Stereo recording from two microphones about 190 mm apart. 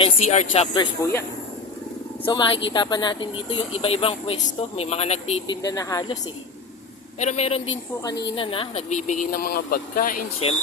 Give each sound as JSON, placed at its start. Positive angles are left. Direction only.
{"t": 0.0, "sound": "speech", "side_deg": 35}
{"t": 2.2, "sound": "speech", "side_deg": 25}
{"t": 5.6, "sound": "speech", "side_deg": 20}
{"t": 7.2, "sound": "speech", "side_deg": 35}